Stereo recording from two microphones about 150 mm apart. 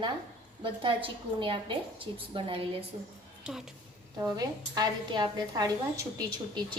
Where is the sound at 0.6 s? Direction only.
35° right (ahead or behind).